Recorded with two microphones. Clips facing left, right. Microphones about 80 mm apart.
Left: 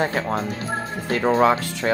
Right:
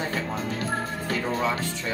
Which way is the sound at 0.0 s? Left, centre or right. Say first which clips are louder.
Left 7 dB; left.